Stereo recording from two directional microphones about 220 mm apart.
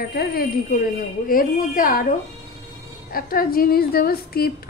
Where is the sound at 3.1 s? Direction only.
40° left (ahead or behind).